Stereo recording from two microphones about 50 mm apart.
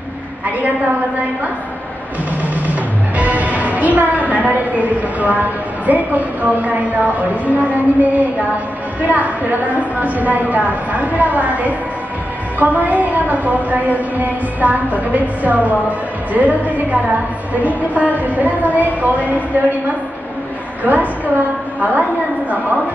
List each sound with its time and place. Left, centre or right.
2.4 s a woman's voice: right
20.8 s a woman's voice: right